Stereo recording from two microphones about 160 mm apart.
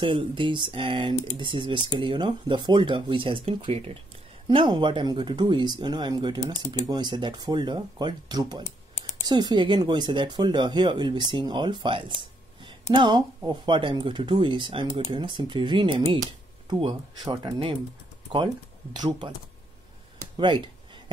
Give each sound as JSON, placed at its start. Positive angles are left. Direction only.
{"t": 0.0, "sound": "speech", "side_deg": -30}
{"t": 18.9, "sound": "speech", "side_deg": -30}
{"t": 20.2, "sound": "a sound", "side_deg": -30}